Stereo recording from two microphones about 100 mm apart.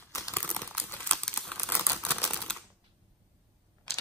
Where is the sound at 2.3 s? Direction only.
5° left (ahead or behind).